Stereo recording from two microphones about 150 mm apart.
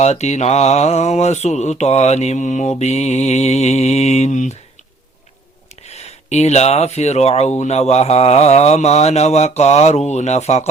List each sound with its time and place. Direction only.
0.0 s speech: 45° left (ahead or behind)
5.8 s speech: 45° left (ahead or behind)